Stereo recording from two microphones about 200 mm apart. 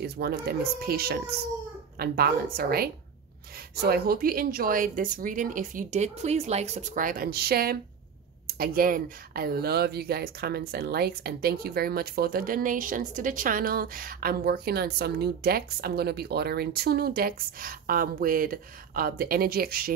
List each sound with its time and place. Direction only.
0.0 s speech: 50° right (ahead or behind)